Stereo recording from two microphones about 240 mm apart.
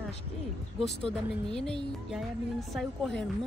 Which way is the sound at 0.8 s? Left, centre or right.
Centre.